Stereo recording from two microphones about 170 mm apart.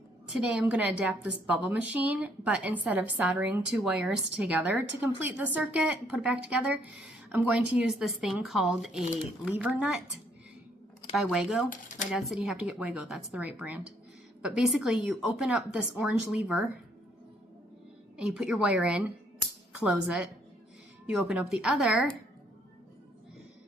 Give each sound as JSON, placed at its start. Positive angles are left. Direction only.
{"t": 0.3, "sound": "a woman's voice", "side_deg": -5}
{"t": 9.0, "sound": "speech", "side_deg": 40}
{"t": 9.4, "sound": "a woman's voice", "side_deg": -5}
{"t": 11.1, "sound": "a woman's voice", "side_deg": 0}
{"t": 18.2, "sound": "a woman's voice", "side_deg": -5}